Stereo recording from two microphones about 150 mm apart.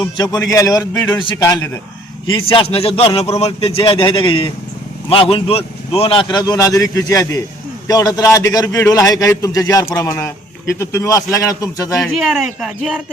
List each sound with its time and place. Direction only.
0.0 s a man's voice: 25° left (ahead or behind)
1.5 s a man's voice: 15° left (ahead or behind)
2.2 s a man's voice: 35° left (ahead or behind)
11.9 s speech: centre (ahead or behind)